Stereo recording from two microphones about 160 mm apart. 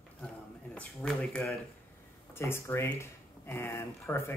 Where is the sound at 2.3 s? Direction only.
15° left (ahead or behind).